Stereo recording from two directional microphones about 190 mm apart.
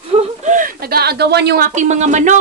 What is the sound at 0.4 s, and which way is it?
Speech, 40° right (ahead or behind).